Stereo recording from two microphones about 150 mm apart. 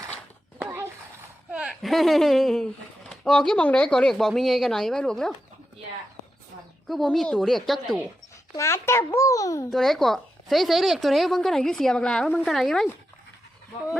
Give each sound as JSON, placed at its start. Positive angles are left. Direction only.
{"t": 0.6, "sound": "a sound", "side_deg": -15}
{"t": 1.5, "sound": "speech", "side_deg": 0}
{"t": 6.8, "sound": "speech", "side_deg": 0}
{"t": 8.5, "sound": "a child's voice", "side_deg": 20}
{"t": 9.6, "sound": "speech", "side_deg": 0}